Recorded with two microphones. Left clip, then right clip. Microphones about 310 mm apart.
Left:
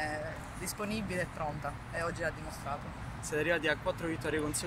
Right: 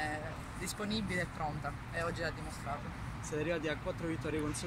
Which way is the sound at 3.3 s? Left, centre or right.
Left.